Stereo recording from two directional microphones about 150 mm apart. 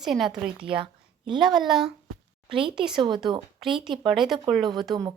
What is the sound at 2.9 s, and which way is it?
Speech, 30° right (ahead or behind).